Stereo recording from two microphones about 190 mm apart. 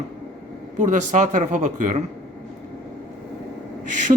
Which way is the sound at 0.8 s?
40° right (ahead or behind).